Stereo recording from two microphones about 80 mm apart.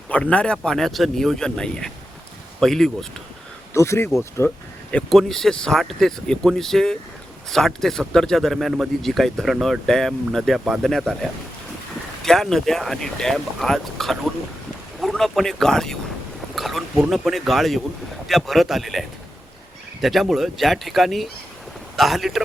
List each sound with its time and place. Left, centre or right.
0.1 s speech: centre
3.8 s speech: left
4.4 s a sound: centre
5.0 s speech: centre
12.2 s speech: centre